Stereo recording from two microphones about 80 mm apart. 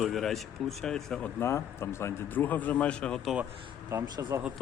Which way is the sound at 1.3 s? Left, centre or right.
Left.